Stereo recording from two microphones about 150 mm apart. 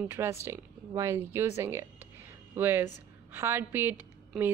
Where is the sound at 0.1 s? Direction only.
15° right (ahead or behind).